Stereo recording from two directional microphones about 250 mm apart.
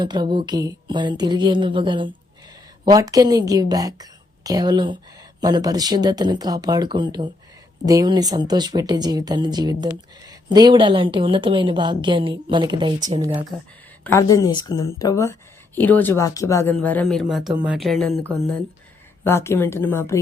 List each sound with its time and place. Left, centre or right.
0.0 s speech: centre
13.0 s speech: right
14.0 s speech: centre
19.2 s speech: centre